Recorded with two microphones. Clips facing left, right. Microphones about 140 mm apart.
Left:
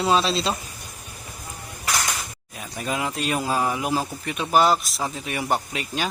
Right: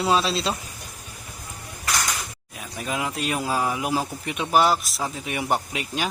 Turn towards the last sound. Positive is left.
turn(degrees=-15)  # may be behind; listen again after turning